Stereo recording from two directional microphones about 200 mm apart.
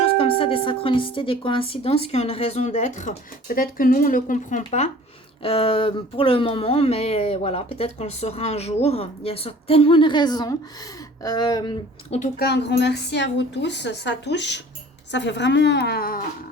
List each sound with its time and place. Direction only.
0.2 s speech: 25° left (ahead or behind)
12.2 s a woman's voice: 55° left (ahead or behind)